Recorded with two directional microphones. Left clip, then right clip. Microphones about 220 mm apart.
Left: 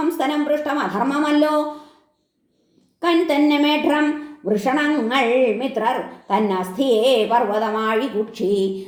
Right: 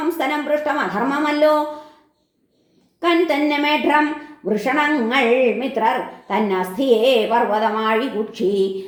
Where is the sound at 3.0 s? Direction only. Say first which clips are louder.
Even; 30° left (ahead or behind).